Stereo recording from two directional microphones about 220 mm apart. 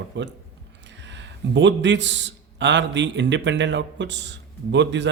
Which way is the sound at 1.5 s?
55° right (ahead or behind).